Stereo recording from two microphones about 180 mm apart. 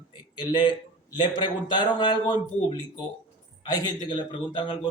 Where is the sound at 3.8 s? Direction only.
25° left (ahead or behind).